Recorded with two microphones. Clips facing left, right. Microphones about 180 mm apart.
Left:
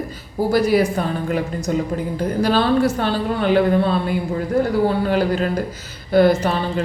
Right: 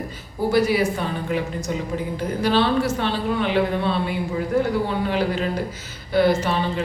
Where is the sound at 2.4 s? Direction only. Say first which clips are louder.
Left 2 dB; 45° left (ahead or behind).